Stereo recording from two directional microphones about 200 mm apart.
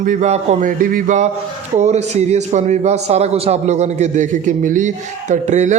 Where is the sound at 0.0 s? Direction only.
40° right (ahead or behind).